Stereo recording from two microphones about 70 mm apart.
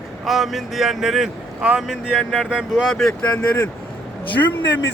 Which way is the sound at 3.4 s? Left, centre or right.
Left.